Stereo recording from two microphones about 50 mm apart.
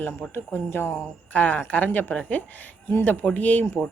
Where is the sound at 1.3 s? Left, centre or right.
Left.